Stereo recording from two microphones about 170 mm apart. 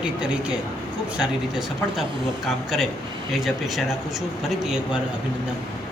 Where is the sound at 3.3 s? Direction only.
Centre (ahead or behind).